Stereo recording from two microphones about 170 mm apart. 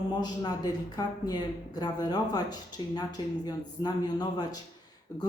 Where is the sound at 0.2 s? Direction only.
25° left (ahead or behind).